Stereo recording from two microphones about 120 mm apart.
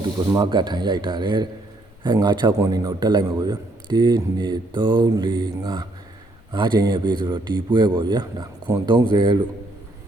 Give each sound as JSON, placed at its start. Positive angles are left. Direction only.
{"t": 0.2, "sound": "a man's voice", "side_deg": -40}